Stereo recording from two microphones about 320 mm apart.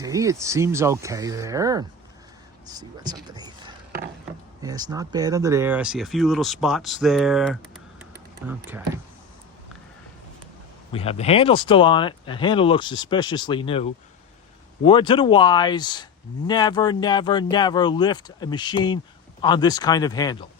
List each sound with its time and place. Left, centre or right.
0.0 s speech: centre
4.6 s speech: centre
10.9 s speech: centre
14.8 s speech: centre